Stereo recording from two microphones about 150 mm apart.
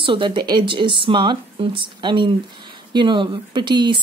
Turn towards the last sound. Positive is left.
turn(degrees=-30)  # may be behind; listen again after turning